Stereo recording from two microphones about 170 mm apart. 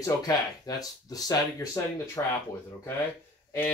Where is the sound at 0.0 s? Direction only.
20° left (ahead or behind).